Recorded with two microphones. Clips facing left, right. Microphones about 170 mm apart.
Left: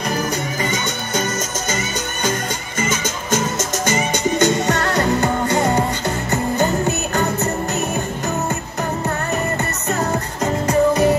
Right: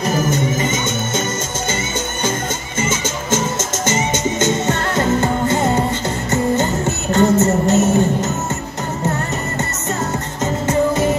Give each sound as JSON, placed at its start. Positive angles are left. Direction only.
{"t": 0.3, "sound": "music", "side_deg": -25}
{"t": 2.8, "sound": "music", "side_deg": -25}
{"t": 10.4, "sound": "music", "side_deg": -20}